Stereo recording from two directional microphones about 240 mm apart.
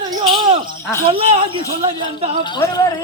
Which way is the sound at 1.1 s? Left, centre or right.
Right.